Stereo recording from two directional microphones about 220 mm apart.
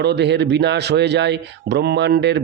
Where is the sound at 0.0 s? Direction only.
50° right (ahead or behind).